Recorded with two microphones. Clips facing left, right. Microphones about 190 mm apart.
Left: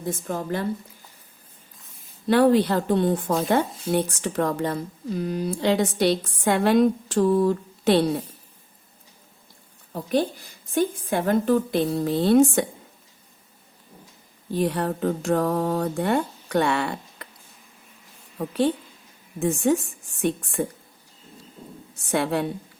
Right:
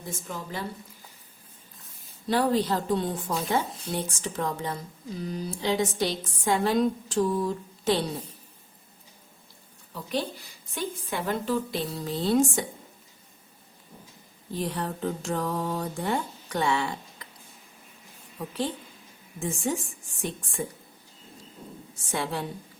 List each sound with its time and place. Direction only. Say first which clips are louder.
0.1 s speech: left 9 dB; 55° left (ahead or behind)
2.3 s speech: left 7 dB; 65° left (ahead or behind)
9.9 s a woman's voice: left 7 dB; 50° left (ahead or behind)
14.5 s speech: left 7 dB; 65° left (ahead or behind)
18.3 s speech: left 8 dB; 65° left (ahead or behind)
22.1 s speech: left 7 dB; 60° left (ahead or behind)